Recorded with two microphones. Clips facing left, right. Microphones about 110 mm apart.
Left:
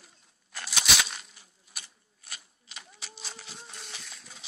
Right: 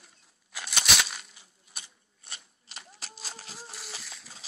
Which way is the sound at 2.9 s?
40° right (ahead or behind).